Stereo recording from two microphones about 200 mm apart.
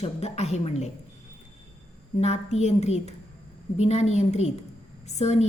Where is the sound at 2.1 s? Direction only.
35° left (ahead or behind).